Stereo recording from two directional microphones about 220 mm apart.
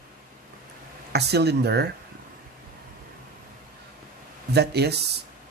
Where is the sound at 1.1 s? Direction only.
50° right (ahead or behind).